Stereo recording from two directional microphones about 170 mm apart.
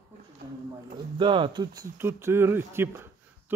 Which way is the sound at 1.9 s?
15° right (ahead or behind).